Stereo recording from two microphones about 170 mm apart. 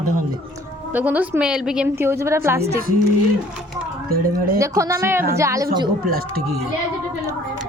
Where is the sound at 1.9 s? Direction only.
15° right (ahead or behind).